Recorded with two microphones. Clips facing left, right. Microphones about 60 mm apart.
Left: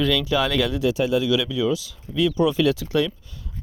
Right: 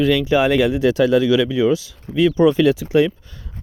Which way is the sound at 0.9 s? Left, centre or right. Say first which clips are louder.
Right 6 dB; right.